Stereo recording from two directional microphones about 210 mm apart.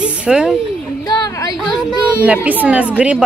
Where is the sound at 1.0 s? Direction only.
20° left (ahead or behind).